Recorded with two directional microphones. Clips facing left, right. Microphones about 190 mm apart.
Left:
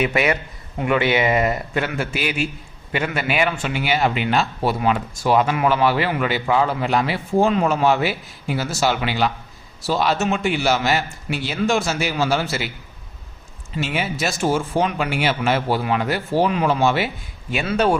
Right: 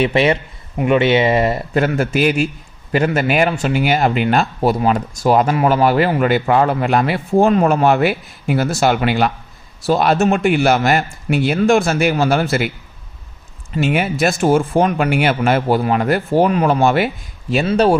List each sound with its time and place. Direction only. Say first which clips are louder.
0.0 s speech: right 5 dB; 30° right (ahead or behind)
1.8 s a man's voice: right 12 dB; 45° right (ahead or behind)
13.7 s speech: right 7 dB; 55° right (ahead or behind)
17.5 s speech: right 5 dB; 35° right (ahead or behind)